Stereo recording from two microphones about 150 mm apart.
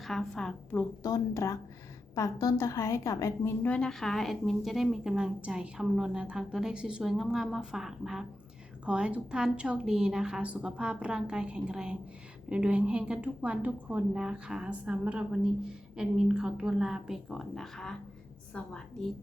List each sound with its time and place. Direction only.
0.0 s a woman's voice: centre (ahead or behind)
1.0 s a woman's voice: 25° left (ahead or behind)
3.6 s a woman's voice: 5° left (ahead or behind)